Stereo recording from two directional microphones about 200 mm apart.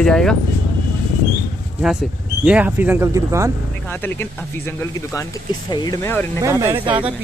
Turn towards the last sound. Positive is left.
turn(degrees=-25)  # may be behind; listen again after turning